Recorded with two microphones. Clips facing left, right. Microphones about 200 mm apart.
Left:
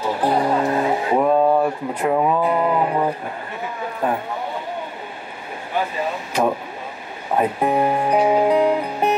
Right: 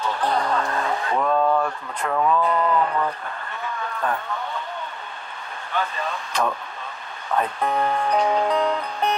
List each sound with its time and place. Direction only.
0.0 s music: 5° left (ahead or behind)
1.1 s a sound: 20° left (ahead or behind)
2.0 s speech: 25° left (ahead or behind)
2.4 s music: 10° left (ahead or behind)
5.8 s speech: 5° left (ahead or behind)